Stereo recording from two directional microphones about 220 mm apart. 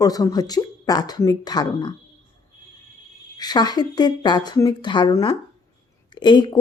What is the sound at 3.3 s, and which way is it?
Speech, 20° left (ahead or behind).